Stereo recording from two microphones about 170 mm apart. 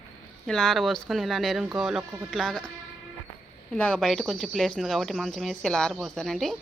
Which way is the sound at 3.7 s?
5° left (ahead or behind).